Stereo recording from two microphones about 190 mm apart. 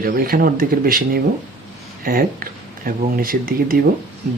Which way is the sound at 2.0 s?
50° right (ahead or behind).